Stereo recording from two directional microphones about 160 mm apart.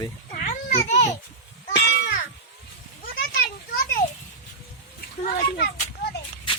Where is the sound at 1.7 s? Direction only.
75° left (ahead or behind).